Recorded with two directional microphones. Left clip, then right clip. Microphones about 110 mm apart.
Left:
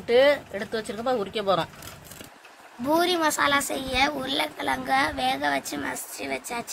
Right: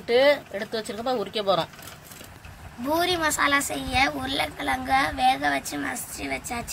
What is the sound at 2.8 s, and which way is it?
A woman's voice, 80° left.